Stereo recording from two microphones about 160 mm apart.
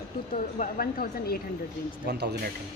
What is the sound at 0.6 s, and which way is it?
Speech, 65° left (ahead or behind).